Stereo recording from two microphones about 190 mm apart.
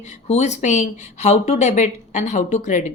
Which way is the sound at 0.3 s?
35° left (ahead or behind).